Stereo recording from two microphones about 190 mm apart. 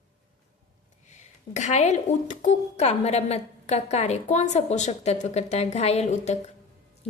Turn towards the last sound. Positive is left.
turn(degrees=35)  # may be behind; listen again after turning